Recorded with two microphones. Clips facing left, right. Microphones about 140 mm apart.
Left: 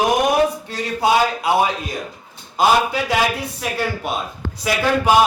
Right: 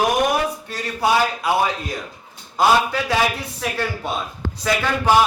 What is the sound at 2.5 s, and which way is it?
Speech, 15° left (ahead or behind).